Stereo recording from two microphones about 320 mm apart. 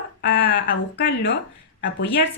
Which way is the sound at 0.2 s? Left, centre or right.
Left.